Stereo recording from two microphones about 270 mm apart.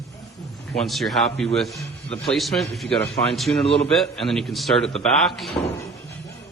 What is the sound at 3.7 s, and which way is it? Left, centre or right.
Speech, left.